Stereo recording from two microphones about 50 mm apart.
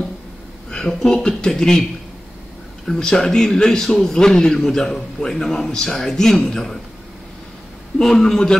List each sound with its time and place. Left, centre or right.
0.7 s a man's voice: centre
8.0 s a man's voice: centre